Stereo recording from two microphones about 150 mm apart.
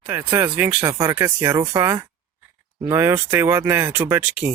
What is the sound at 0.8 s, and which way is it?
Speech, 30° right (ahead or behind).